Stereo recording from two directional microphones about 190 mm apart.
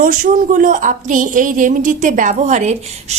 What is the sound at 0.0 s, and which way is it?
A woman's voice, 45° right (ahead or behind).